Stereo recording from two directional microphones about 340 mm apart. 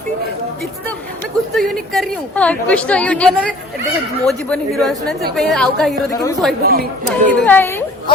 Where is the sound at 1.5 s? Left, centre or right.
Centre.